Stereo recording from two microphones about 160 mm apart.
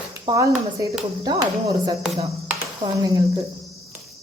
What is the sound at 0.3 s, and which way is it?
Speech, 30° right (ahead or behind).